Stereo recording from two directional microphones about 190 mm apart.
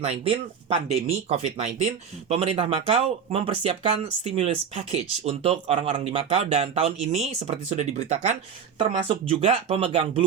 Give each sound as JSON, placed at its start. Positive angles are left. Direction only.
{"t": 0.0, "sound": "speech", "side_deg": -30}